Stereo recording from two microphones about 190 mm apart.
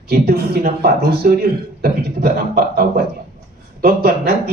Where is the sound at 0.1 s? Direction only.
55° right (ahead or behind).